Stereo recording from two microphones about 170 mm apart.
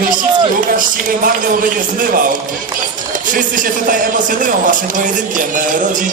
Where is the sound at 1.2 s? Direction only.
55° right (ahead or behind).